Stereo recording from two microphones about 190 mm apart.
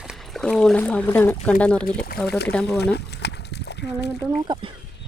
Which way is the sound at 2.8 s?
60° left (ahead or behind).